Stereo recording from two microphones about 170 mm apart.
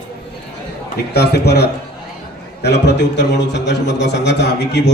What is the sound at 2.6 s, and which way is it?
A man's voice, 85° left.